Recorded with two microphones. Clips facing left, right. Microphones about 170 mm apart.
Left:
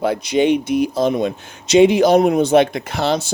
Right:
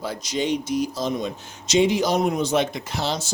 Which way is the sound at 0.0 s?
60° left (ahead or behind).